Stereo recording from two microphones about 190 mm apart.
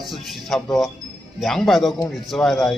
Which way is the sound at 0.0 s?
Centre (ahead or behind).